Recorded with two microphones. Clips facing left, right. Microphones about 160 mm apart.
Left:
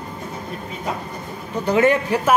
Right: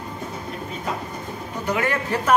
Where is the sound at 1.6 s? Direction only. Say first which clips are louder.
Left 8 dB; 30° left (ahead or behind).